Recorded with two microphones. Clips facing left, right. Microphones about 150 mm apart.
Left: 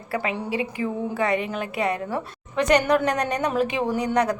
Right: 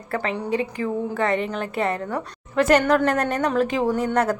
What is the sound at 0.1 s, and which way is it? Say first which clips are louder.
A woman's voice: right 2 dB; 10° left (ahead or behind).